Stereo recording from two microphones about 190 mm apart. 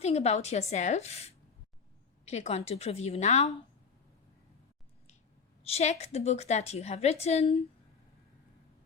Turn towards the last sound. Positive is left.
turn(degrees=30)  # may be behind; listen again after turning